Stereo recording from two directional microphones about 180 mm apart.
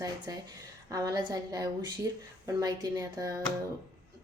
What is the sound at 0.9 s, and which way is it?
A woman's voice, 20° right (ahead or behind).